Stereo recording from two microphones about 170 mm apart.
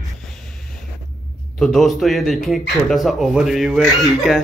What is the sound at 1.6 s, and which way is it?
Speech, centre (ahead or behind).